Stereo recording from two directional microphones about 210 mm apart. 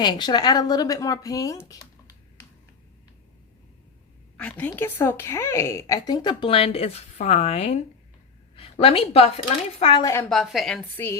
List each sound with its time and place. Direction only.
0.0 s speech: 20° left (ahead or behind)
4.4 s a woman's voice: 5° left (ahead or behind); by 10.0 s 30° left (ahead or behind)
10.0 s speech: 15° left (ahead or behind)
10.2 s a woman's voice: centre (ahead or behind)